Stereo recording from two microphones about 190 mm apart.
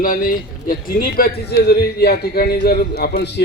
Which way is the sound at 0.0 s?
45° left (ahead or behind).